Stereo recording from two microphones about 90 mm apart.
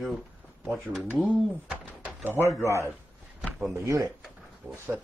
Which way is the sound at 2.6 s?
30° right (ahead or behind).